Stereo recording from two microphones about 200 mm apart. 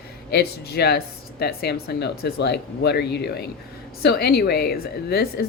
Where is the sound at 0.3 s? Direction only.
50° left (ahead or behind).